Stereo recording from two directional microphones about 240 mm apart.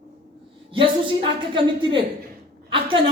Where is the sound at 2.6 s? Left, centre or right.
Right.